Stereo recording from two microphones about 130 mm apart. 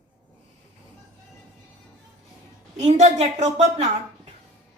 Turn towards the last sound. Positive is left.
turn(degrees=-60)  # may be behind; listen again after turning